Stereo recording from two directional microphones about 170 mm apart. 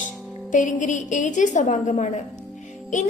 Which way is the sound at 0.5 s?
50° left (ahead or behind).